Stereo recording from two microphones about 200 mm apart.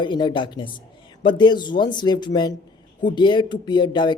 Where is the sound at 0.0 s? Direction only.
25° left (ahead or behind).